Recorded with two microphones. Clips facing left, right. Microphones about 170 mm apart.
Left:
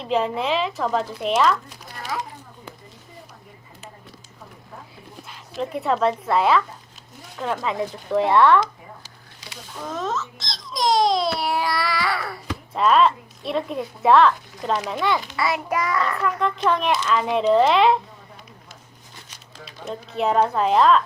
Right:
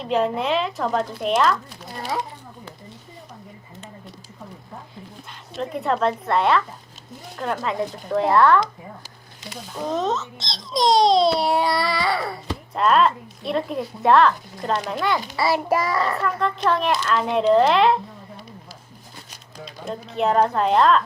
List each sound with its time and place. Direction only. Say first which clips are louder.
0.0 s speech: right 1 dB; centre (ahead or behind)
2.0 s a sound: right 3 dB; 30° right (ahead or behind)
5.3 s speech: left 1 dB; centre (ahead or behind)
9.8 s a child's voice: right 4 dB; 20° right (ahead or behind)
12.7 s speech: left 1 dB; centre (ahead or behind)
15.4 s child singing: right 3 dB; 30° right (ahead or behind)
16.2 s speech: even; 5° left (ahead or behind)
19.6 s speech: right 1 dB; 5° left (ahead or behind)